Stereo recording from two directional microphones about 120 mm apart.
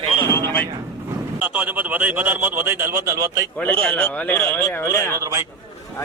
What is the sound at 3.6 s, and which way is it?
A man's voice, 10° left (ahead or behind).